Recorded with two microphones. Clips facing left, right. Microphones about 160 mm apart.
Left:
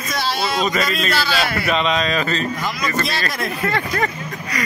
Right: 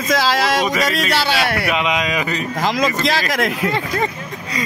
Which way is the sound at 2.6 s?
90° right.